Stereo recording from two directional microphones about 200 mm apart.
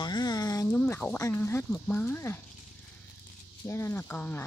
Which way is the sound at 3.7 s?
15° left (ahead or behind).